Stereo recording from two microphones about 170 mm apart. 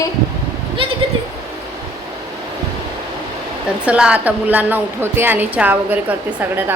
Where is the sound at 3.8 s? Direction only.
5° right (ahead or behind).